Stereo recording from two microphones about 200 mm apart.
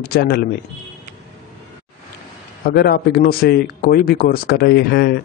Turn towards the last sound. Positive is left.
turn(degrees=55)  # may be behind; listen again after turning